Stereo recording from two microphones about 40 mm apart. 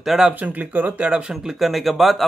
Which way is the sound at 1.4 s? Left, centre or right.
Centre.